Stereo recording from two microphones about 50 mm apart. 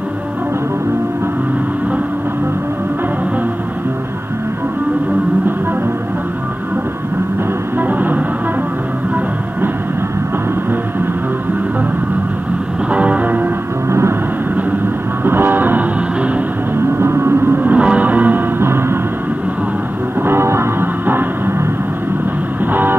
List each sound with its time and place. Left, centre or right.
7.8 s music: right
12.9 s music: right
13.8 s vehicle: right
15.2 s vehicle: right
17.0 s a sound: right
17.6 s music: right
18.6 s music: right
20.2 s music: right
20.8 s music: right
22.7 s music: right